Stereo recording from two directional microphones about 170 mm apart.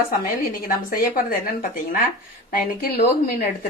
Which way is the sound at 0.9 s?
55° left (ahead or behind).